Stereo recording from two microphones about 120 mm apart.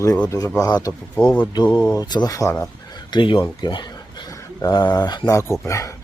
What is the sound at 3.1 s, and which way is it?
Speech, 40° left (ahead or behind).